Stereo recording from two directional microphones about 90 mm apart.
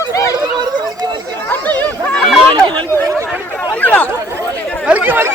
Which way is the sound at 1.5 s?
20° left (ahead or behind).